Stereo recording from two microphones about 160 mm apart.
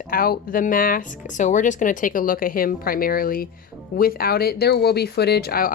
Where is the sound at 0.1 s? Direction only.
65° left (ahead or behind).